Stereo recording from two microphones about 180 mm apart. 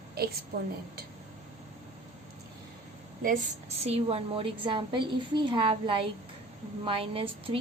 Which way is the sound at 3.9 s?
35° right (ahead or behind).